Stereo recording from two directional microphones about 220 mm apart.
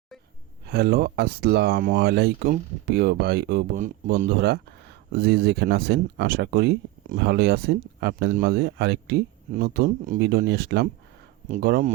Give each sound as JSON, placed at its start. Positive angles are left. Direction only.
{"t": 0.7, "sound": "speech", "side_deg": -45}